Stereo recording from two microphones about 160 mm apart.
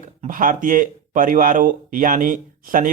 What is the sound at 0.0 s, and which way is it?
Speech, 55° right (ahead or behind).